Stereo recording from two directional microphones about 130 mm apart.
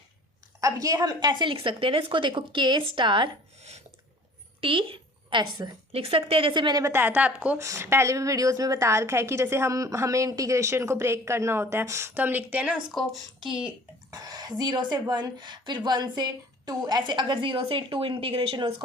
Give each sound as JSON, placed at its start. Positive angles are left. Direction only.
{"t": 0.6, "sound": "a woman's voice", "side_deg": -25}
{"t": 4.6, "sound": "a woman's voice", "side_deg": -40}
{"t": 5.9, "sound": "a woman's voice", "side_deg": -45}
{"t": 7.6, "sound": "a woman's voice", "side_deg": -20}
{"t": 12.9, "sound": "speech", "side_deg": 0}
{"t": 14.1, "sound": "a woman's voice", "side_deg": -30}